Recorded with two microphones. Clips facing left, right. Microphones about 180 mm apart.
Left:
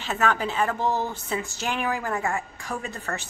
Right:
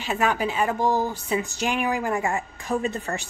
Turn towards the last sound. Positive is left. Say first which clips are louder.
# right 6 dB
turn(degrees=-20)  # may be behind; listen again after turning